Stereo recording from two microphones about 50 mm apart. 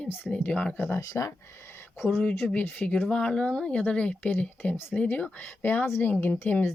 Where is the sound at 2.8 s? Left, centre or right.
Left.